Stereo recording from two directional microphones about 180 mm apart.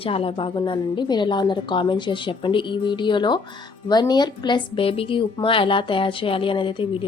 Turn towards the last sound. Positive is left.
turn(degrees=30)  # may be behind; listen again after turning